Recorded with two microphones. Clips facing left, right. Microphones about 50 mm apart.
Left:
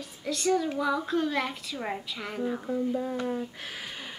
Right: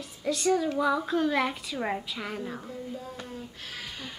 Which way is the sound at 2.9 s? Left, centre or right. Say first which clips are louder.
Left 9 dB; left.